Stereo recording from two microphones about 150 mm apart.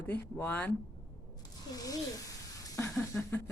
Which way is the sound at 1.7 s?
25° left (ahead or behind).